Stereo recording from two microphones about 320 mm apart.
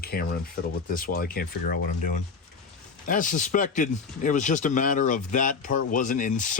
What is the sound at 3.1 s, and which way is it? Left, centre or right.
Speech, left.